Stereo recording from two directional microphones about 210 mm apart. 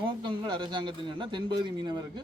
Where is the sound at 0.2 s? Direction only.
20° right (ahead or behind).